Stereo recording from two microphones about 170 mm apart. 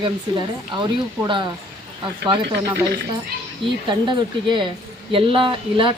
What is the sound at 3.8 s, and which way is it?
Speech, 30° right (ahead or behind).